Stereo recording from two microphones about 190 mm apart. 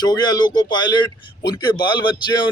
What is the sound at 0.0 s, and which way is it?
A man's voice, 20° left (ahead or behind).